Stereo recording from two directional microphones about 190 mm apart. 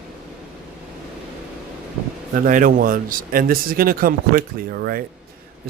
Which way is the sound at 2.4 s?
45° right (ahead or behind).